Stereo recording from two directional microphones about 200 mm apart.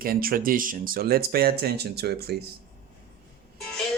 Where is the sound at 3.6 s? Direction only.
5° left (ahead or behind).